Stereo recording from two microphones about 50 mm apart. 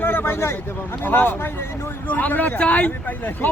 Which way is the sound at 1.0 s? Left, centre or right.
Left.